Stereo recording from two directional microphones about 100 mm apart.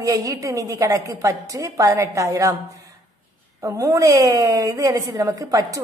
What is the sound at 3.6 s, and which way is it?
A woman's voice, 30° right (ahead or behind).